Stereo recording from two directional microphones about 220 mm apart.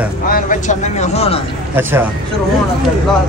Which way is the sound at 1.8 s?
10° right (ahead or behind).